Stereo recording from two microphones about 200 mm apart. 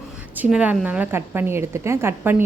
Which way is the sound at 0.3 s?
5° right (ahead or behind).